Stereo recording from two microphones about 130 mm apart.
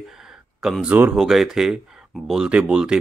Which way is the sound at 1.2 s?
5° right (ahead or behind).